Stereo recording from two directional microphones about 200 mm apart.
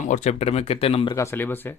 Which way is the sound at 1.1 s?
15° left (ahead or behind).